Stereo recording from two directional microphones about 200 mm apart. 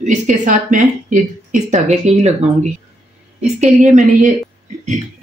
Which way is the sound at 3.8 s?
35° right (ahead or behind).